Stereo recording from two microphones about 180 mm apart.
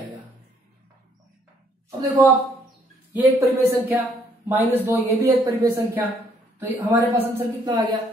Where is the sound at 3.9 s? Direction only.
10° right (ahead or behind).